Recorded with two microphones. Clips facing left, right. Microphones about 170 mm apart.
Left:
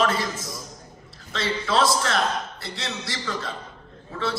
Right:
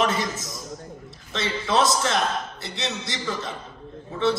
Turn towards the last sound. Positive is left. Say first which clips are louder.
# right 6 dB
turn(degrees=-20)  # may be behind; listen again after turning